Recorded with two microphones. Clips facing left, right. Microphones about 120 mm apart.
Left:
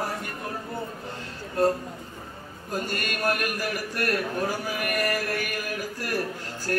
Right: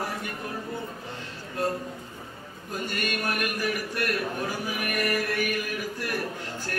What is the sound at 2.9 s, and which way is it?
Speech, 40° left (ahead or behind).